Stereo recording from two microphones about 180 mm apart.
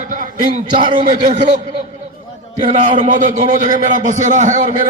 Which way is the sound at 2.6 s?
25° right (ahead or behind).